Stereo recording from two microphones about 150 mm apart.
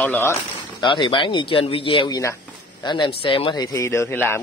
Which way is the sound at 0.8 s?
30° left (ahead or behind).